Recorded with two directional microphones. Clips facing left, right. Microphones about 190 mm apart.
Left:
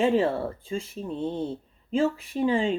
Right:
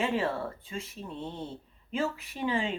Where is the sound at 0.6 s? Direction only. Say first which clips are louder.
Left 8 dB; 30° left (ahead or behind).